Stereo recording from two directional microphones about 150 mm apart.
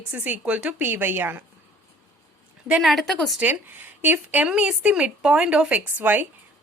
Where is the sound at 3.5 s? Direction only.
10° right (ahead or behind).